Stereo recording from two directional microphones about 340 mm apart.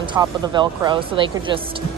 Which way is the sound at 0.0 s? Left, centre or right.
Centre.